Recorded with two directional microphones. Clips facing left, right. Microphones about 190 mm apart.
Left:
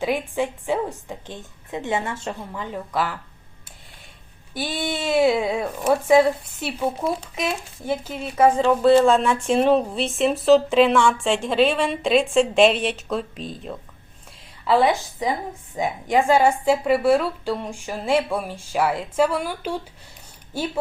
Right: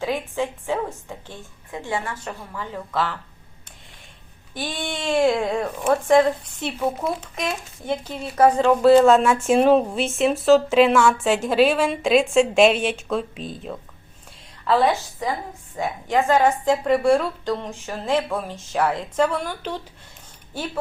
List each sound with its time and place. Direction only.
0.0 s a woman's voice: 15° left (ahead or behind)
4.5 s a woman's voice: 10° left (ahead or behind)
14.6 s a woman's voice: 10° left (ahead or behind)